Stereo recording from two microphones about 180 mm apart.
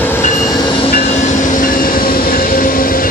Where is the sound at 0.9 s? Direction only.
40° left (ahead or behind).